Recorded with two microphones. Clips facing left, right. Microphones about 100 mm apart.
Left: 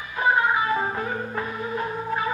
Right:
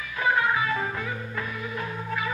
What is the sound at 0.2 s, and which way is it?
Music, 25° left (ahead or behind).